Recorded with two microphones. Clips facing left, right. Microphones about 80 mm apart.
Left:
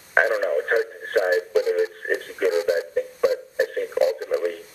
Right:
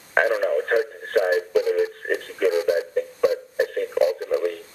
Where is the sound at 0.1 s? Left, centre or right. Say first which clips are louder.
Even; centre.